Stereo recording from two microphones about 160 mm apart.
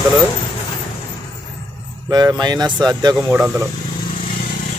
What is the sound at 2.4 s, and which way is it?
Speech, 25° right (ahead or behind).